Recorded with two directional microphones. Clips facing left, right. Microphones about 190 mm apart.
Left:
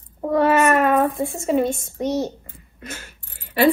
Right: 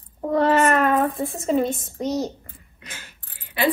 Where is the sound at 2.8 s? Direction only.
50° left (ahead or behind).